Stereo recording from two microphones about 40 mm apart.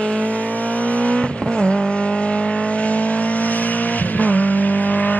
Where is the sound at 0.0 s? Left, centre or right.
Left.